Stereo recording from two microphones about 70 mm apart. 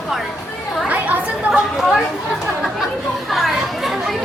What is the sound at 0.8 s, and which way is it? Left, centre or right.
Chatter, right.